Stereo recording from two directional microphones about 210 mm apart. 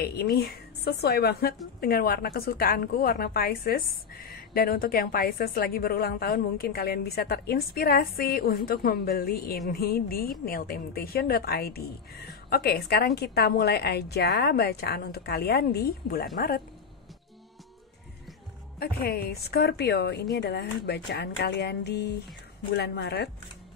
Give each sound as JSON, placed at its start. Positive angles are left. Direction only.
{"t": 0.0, "sound": "a woman's voice", "side_deg": 50}
{"t": 18.8, "sound": "a woman's voice", "side_deg": 45}